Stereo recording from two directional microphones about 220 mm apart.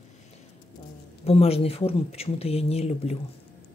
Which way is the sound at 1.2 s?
25° left (ahead or behind).